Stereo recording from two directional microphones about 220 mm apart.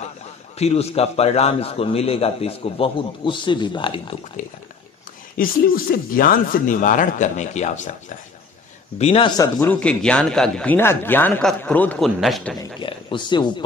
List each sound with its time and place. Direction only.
0.6 s a man's voice: 30° left (ahead or behind)
5.4 s speech: 40° left (ahead or behind)
8.9 s a man's voice: 25° left (ahead or behind)
9.6 s a man's voice: 5° left (ahead or behind)
12.5 s a man's voice: 20° left (ahead or behind)